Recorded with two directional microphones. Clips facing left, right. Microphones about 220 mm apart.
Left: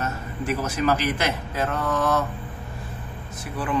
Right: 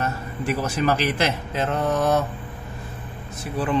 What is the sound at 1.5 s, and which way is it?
Speech, 20° right (ahead or behind).